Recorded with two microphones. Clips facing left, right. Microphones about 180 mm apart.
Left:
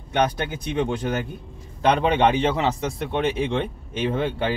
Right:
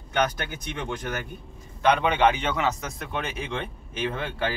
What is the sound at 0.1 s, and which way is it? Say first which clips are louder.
A man's voice: left 4 dB; 25° left (ahead or behind).